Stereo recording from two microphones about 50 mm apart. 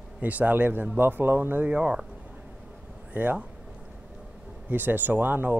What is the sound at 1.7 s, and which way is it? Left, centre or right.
Speech, right.